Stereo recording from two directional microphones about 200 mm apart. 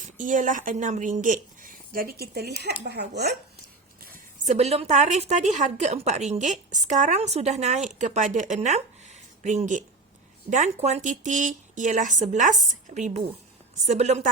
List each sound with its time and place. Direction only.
0.2 s a woman's voice: 40° right (ahead or behind)
4.0 s a woman's voice: 40° right (ahead or behind)